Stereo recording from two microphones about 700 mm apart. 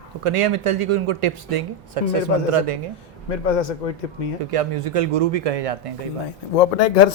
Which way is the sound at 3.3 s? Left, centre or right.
Left.